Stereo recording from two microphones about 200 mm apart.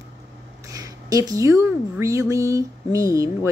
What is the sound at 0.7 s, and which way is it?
Speech, 15° right (ahead or behind).